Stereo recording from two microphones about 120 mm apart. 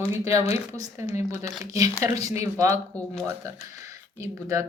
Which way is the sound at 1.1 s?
70° left (ahead or behind).